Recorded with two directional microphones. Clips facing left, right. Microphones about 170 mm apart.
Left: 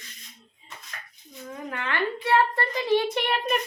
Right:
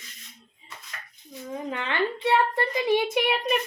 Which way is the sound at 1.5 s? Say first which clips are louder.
Right 1 dB; 20° right (ahead or behind).